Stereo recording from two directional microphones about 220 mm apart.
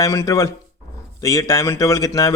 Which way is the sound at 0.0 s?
15° left (ahead or behind).